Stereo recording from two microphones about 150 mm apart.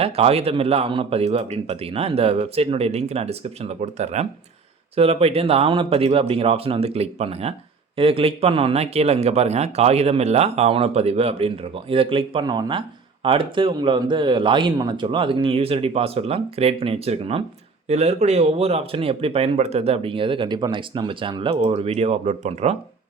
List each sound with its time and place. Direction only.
0.0 s speech: 40° right (ahead or behind)